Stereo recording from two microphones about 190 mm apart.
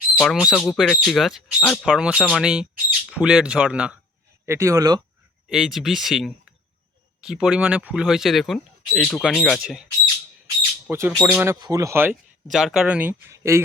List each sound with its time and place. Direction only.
0.1 s speech: centre (ahead or behind); by 5.0 s 20° right (ahead or behind)
5.5 s speech: centre (ahead or behind)
10.8 s speech: 10° right (ahead or behind)
12.5 s speech: centre (ahead or behind)